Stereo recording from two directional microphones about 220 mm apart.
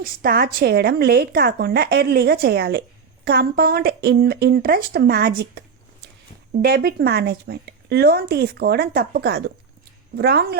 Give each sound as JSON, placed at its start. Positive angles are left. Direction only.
{"t": 0.0, "sound": "a woman's voice", "side_deg": -40}